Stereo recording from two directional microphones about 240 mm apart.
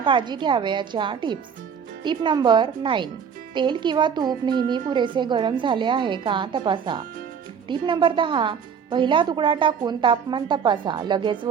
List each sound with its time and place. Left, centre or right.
0.0 s speech: centre